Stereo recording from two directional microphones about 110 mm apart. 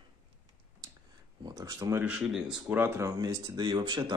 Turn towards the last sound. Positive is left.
turn(degrees=-45)  # may be behind; listen again after turning